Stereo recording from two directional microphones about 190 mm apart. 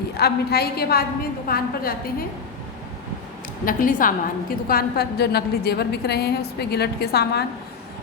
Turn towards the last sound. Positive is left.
turn(degrees=55)  # may be behind; listen again after turning